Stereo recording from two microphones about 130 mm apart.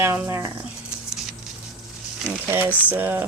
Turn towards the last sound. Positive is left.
turn(degrees=-15)  # may be behind; listen again after turning